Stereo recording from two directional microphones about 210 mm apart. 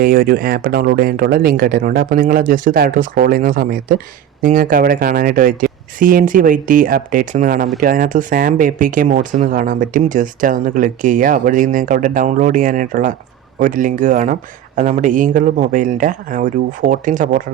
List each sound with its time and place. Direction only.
0.0 s speech: 45° right (ahead or behind)